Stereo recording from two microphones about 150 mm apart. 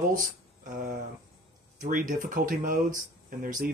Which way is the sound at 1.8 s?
65° right (ahead or behind).